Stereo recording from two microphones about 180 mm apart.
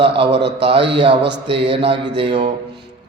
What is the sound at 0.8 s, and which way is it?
Speech, 75° right (ahead or behind).